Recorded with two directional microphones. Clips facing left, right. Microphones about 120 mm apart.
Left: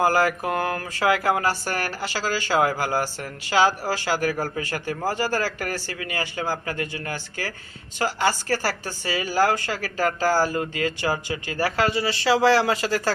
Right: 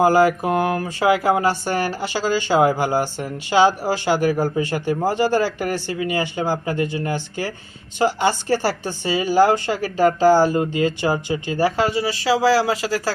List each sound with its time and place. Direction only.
0.0 s speech: 20° right (ahead or behind); by 13.0 s 5° right (ahead or behind)